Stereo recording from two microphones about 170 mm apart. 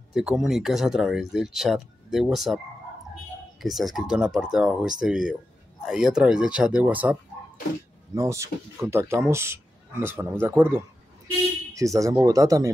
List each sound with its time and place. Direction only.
0.1 s speech: centre (ahead or behind); by 12.7 s 20° right (ahead or behind)